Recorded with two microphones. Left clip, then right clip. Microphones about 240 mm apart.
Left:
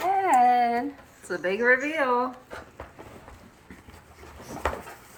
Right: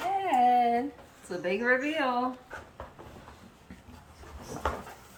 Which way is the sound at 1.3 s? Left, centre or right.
Centre.